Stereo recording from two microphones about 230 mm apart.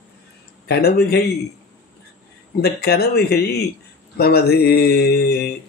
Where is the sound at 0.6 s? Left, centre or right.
Left.